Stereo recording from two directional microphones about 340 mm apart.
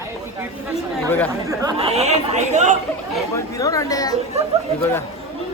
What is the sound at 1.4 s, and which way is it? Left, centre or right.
Speech, centre.